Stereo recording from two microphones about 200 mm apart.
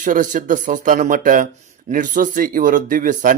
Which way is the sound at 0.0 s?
40° right (ahead or behind).